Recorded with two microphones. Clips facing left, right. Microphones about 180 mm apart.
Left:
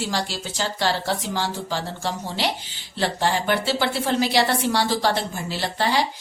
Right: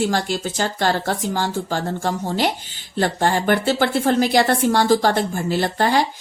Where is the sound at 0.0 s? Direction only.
50° right (ahead or behind).